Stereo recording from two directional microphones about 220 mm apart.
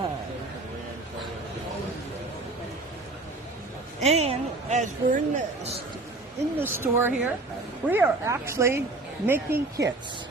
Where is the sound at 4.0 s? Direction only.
30° right (ahead or behind).